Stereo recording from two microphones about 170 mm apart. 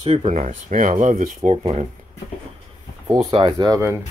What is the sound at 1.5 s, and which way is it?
Speech, 40° right (ahead or behind).